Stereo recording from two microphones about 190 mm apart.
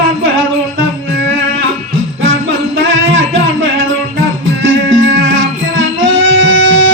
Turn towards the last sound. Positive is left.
turn(degrees=-90)